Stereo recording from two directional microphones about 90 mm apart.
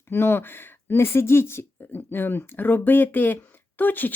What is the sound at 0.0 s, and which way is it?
Speech, 25° left (ahead or behind).